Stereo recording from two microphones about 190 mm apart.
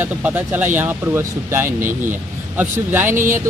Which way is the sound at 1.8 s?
45° right (ahead or behind).